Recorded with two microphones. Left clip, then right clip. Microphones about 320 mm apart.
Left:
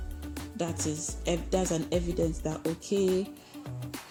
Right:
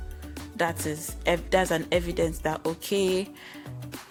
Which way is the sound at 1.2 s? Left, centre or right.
Right.